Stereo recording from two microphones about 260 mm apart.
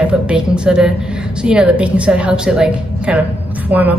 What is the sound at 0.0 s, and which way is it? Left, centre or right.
A woman's voice, centre.